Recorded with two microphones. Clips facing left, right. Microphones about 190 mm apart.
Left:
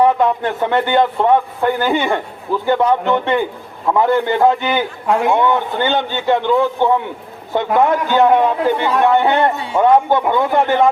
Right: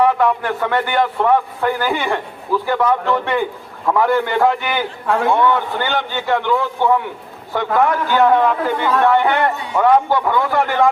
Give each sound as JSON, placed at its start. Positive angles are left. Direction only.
{"t": 0.0, "sound": "a man's voice", "side_deg": 20}